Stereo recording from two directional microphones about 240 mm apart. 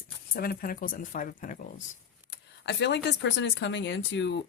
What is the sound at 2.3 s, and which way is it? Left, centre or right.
Speech, left.